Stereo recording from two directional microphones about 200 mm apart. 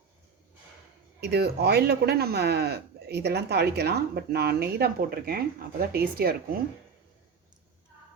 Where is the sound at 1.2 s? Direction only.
55° right (ahead or behind).